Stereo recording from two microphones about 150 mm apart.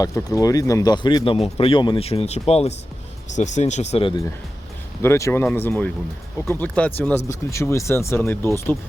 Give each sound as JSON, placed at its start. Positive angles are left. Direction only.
{"t": 0.0, "sound": "speech", "side_deg": 25}
{"t": 2.0, "sound": "speech", "side_deg": 45}
{"t": 5.0, "sound": "speech", "side_deg": 20}